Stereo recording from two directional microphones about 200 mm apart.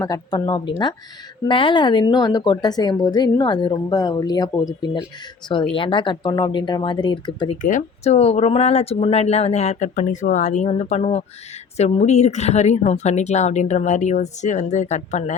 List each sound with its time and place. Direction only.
0.0 s a woman's voice: 20° left (ahead or behind)
7.6 s speech: 40° left (ahead or behind)